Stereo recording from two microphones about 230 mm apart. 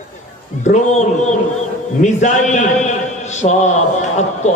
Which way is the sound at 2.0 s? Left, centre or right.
Left.